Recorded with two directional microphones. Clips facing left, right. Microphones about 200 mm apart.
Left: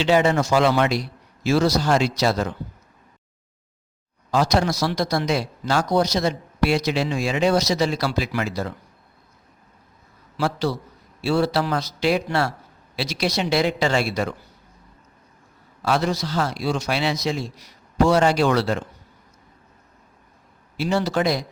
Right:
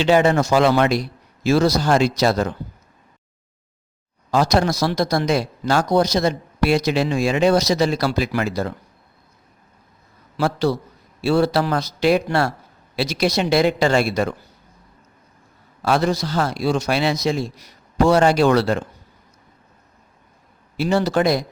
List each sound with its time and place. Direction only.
0.0 s speech: 55° right (ahead or behind)
4.3 s speech: 55° right (ahead or behind)
10.3 s a man's voice: 50° right (ahead or behind)
15.8 s speech: 50° right (ahead or behind)
20.7 s speech: 55° right (ahead or behind)